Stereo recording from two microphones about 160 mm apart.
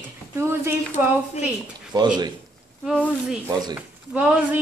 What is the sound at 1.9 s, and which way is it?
Speech, 25° right (ahead or behind).